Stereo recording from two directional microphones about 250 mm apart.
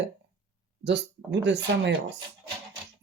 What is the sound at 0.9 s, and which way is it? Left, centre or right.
Speech, right.